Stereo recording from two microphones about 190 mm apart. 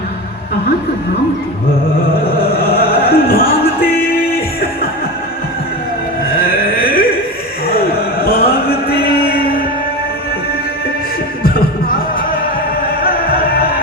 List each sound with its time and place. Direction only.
2.2 s music: 50° left (ahead or behind)
6.2 s a sound: 50° left (ahead or behind)
11.4 s music: 50° left (ahead or behind)
13.0 s music: 50° left (ahead or behind)